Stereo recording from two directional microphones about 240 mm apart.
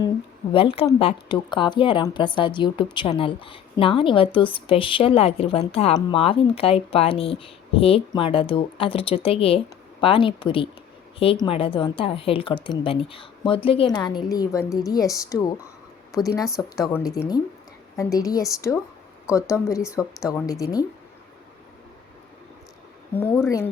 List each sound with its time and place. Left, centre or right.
0.5 s a woman's voice: left
23.1 s a woman's voice: centre